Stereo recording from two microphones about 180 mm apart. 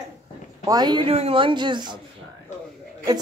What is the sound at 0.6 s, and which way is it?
A woman's voice, 20° right (ahead or behind).